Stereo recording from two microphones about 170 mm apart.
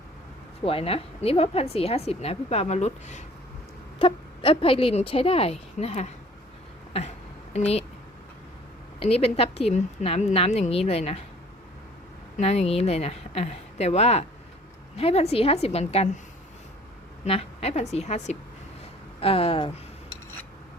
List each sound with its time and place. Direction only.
0.6 s a woman's voice: 35° left (ahead or behind)
3.9 s a woman's voice: 30° left (ahead or behind)
9.0 s a woman's voice: 35° left (ahead or behind)
12.4 s a woman's voice: 35° left (ahead or behind)
17.2 s a woman's voice: 35° left (ahead or behind)